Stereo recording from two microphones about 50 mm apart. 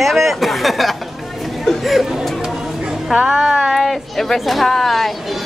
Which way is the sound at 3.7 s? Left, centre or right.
Centre.